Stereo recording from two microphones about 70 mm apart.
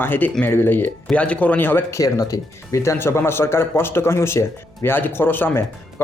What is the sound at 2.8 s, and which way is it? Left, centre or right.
Speech, left.